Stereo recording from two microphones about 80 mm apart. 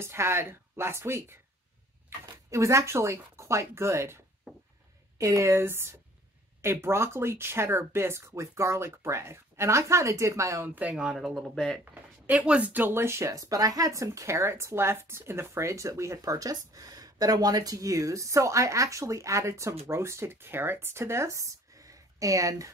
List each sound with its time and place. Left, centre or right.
0.0 s speech: right
5.2 s speech: right
10.7 s speech: centre
11.8 s speech: centre; by 22.7 s right